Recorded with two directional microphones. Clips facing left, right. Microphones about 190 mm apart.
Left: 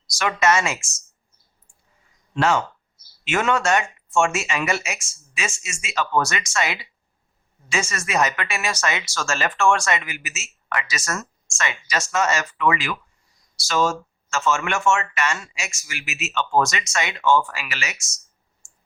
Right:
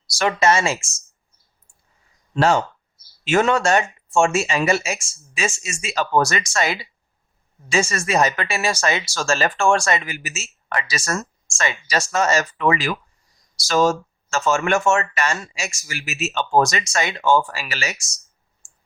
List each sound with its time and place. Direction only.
0.2 s speech: 30° right (ahead or behind)
2.3 s speech: 35° right (ahead or behind)